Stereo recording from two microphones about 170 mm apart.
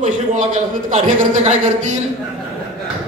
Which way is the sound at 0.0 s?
50° right (ahead or behind).